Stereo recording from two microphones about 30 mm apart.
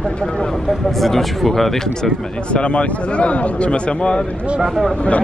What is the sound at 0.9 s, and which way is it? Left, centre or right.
Speech, centre.